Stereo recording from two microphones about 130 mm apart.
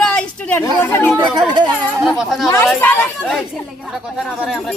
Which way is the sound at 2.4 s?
20° left (ahead or behind).